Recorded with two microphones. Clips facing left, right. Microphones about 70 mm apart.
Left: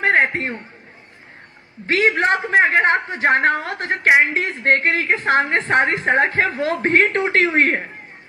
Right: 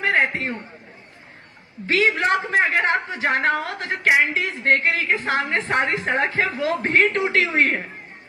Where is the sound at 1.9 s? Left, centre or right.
Left.